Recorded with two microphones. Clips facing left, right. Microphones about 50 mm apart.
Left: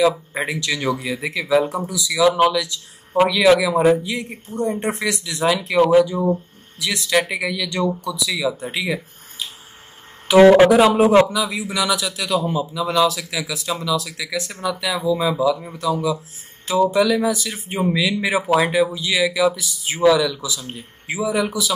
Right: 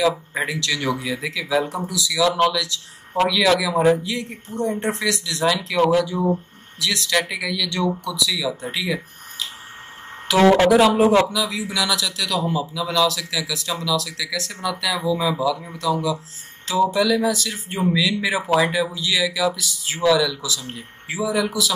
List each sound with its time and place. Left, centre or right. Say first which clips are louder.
0.0 s a man's voice: left 2 dB; centre
16.9 s speech: left 2 dB; centre